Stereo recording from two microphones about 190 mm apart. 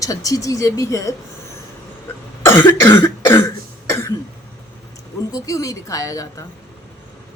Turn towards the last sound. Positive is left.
turn(degrees=15)  # may be behind; listen again after turning